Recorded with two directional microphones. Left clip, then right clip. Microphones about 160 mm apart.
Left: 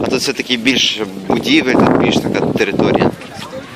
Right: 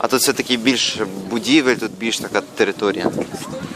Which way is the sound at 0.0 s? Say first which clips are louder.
Left 1 dB; 20° right (ahead or behind).